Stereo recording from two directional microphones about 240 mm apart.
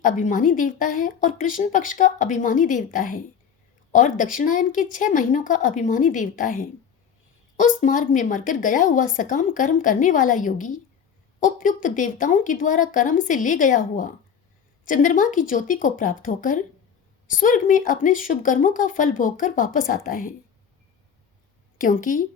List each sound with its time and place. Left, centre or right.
0.0 s a woman's voice: left
21.8 s a woman's voice: left